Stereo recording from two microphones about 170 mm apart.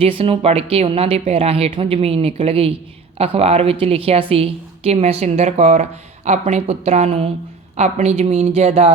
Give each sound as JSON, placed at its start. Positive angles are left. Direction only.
{"t": 0.0, "sound": "speech", "side_deg": -35}